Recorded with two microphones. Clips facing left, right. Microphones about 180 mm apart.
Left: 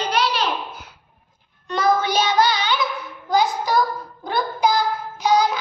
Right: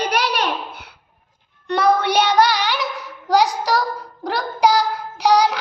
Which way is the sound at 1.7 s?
70° right (ahead or behind).